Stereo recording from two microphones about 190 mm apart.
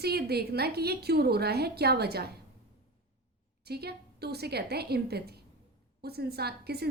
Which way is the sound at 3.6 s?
55° right (ahead or behind).